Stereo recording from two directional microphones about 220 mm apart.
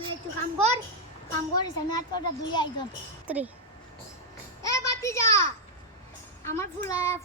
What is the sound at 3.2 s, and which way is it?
Speech, 5° right (ahead or behind).